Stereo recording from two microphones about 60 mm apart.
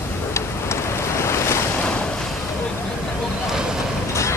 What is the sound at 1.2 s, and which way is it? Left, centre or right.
Waves, left.